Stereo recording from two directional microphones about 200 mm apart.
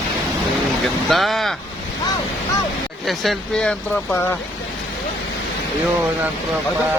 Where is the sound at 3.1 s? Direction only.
Centre (ahead or behind).